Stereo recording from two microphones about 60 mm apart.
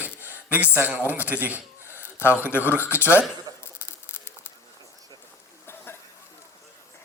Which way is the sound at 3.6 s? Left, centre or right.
Left.